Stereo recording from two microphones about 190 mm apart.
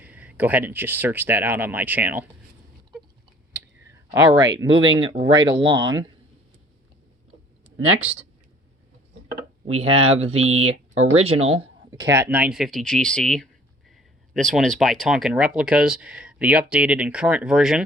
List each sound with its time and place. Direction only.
0.0 s speech: 10° right (ahead or behind)
4.1 s speech: 15° right (ahead or behind)
9.6 s speech: 30° right (ahead or behind)
10.7 s speech: 90° right
11.2 s speech: 30° right (ahead or behind)
11.9 s speech: 15° right (ahead or behind)